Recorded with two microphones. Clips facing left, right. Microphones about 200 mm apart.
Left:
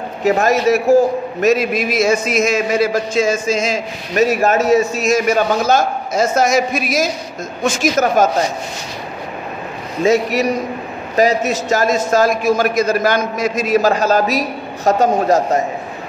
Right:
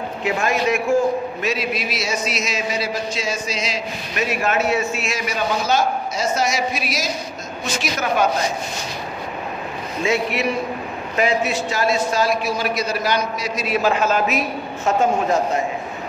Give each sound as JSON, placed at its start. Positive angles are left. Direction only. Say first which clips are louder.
{"t": 0.2, "sound": "a man's voice", "louder": "left 7 dB", "side_deg": 40}
{"t": 10.0, "sound": "a man's voice", "louder": "left 7 dB", "side_deg": 40}